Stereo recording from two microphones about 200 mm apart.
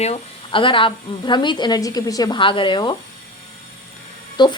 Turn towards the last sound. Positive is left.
turn(degrees=20)  # may be behind; listen again after turning